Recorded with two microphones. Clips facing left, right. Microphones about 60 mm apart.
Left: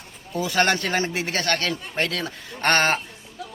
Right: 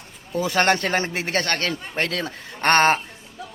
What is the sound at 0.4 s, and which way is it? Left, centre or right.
A man's voice, right.